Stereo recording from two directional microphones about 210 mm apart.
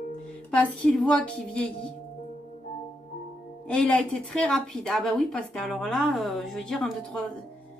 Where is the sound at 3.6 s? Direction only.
5° left (ahead or behind).